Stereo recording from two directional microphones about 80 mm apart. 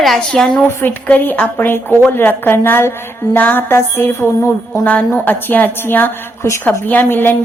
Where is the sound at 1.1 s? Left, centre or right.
Left.